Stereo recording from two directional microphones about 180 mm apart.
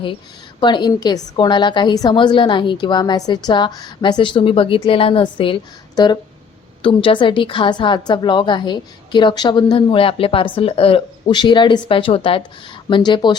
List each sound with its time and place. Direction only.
0.6 s a woman's voice: 25° left (ahead or behind)